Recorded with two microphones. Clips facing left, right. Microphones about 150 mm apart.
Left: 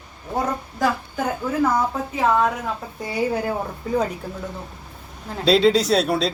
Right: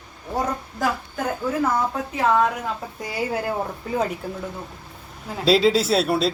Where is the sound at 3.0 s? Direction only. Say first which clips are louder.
Left 5 dB; centre (ahead or behind).